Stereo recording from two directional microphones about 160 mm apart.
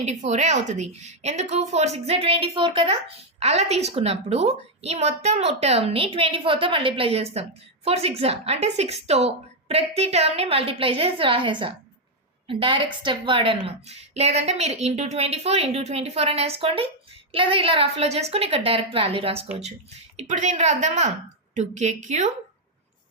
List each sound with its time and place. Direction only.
0.0 s a woman's voice: 45° right (ahead or behind)
20.1 s a woman's voice: 45° right (ahead or behind)